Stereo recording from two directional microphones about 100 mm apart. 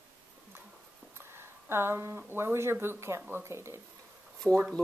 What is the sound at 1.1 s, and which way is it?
Speech, 25° right (ahead or behind).